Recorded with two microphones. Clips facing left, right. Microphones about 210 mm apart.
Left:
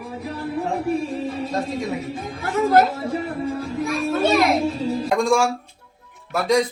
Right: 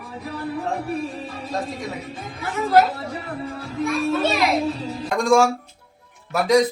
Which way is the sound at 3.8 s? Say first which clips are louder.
Even; centre (ahead or behind).